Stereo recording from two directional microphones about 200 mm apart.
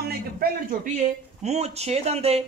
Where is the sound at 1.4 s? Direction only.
35° right (ahead or behind).